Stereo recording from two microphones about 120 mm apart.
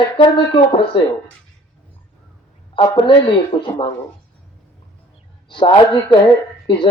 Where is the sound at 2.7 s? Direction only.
45° left (ahead or behind).